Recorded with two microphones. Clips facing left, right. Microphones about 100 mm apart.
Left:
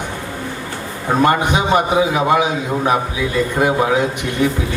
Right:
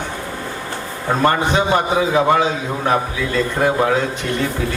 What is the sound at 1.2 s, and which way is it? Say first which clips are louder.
A man's voice: left 1 dB; 15° left (ahead or behind).